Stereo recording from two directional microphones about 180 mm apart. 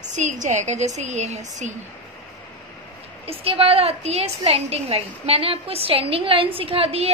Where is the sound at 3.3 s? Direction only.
30° right (ahead or behind).